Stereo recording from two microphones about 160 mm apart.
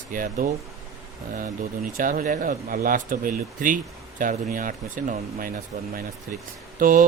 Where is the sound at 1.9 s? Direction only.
60° right (ahead or behind).